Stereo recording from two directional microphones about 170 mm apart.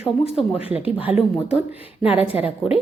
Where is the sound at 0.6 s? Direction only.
35° left (ahead or behind).